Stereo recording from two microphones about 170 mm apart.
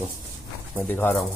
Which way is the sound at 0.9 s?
10° left (ahead or behind).